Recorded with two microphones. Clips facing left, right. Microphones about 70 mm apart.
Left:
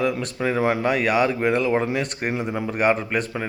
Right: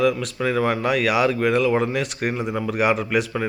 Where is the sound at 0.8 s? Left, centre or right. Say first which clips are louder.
Right 1 dB; centre.